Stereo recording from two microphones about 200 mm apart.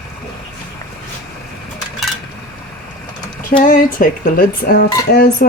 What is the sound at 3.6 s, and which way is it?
Speech, 45° left (ahead or behind).